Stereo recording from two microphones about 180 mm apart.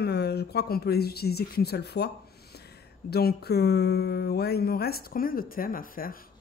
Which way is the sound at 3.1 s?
60° left (ahead or behind).